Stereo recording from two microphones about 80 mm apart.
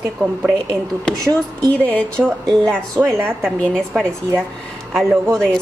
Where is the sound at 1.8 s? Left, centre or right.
Centre.